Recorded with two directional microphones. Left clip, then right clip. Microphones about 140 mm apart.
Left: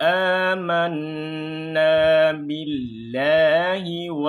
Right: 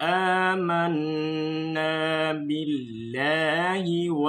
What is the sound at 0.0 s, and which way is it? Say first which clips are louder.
Mantra: left 4 dB; 45° left (ahead or behind).